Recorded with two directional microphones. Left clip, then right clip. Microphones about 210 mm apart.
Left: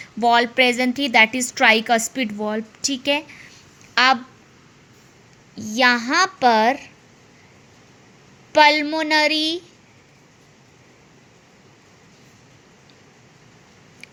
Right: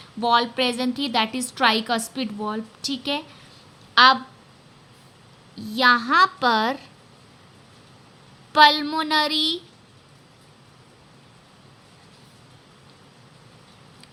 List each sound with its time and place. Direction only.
0.0 s a woman's voice: 20° left (ahead or behind)
5.5 s a child's voice: 15° left (ahead or behind)
8.5 s a child's voice: 15° left (ahead or behind)